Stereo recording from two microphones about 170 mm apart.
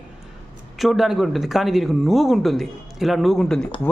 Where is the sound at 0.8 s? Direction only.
Centre (ahead or behind).